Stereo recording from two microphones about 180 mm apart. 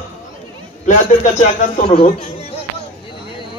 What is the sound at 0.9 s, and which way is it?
Speech, 50° left (ahead or behind).